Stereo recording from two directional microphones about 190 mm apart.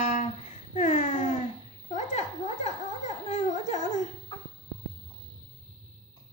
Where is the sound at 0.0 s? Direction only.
40° left (ahead or behind).